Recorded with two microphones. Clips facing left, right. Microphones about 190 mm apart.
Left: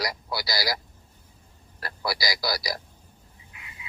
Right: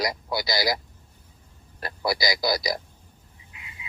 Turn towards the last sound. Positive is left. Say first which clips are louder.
# right 1 dB
turn(degrees=-20)  # may be behind; listen again after turning